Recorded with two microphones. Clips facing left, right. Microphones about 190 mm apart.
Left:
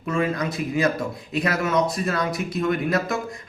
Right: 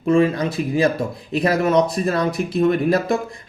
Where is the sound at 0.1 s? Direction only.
30° right (ahead or behind).